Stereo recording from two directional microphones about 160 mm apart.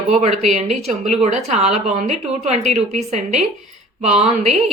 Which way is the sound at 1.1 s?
45° right (ahead or behind).